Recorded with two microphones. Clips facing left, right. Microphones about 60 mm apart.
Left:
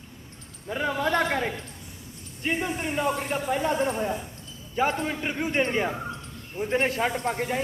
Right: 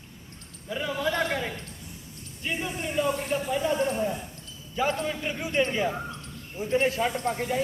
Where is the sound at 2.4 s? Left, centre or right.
Left.